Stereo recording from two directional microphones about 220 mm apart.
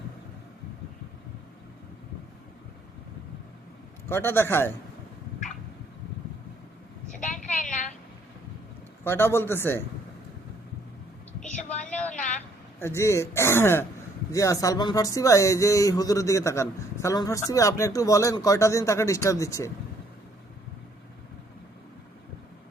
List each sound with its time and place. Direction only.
4.1 s speech: 10° left (ahead or behind)
7.2 s a sound: 35° left (ahead or behind)
9.0 s speech: 10° left (ahead or behind)
11.3 s vehicle: 5° left (ahead or behind)
11.8 s a sound: 5° left (ahead or behind)
12.8 s speech: 10° left (ahead or behind)